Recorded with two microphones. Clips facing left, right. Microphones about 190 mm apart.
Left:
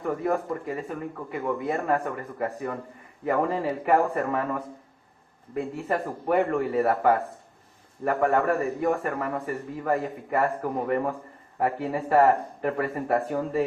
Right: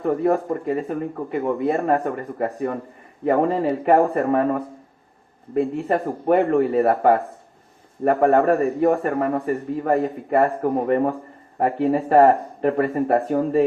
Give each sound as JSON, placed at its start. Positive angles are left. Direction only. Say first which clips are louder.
{"t": 0.0, "sound": "a man's voice", "louder": "right 7 dB", "side_deg": -35}
{"t": 5.9, "sound": "a man's voice", "louder": "right 4 dB", "side_deg": -35}